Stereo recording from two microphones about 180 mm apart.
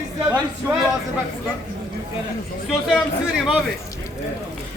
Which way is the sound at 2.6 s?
Centre (ahead or behind).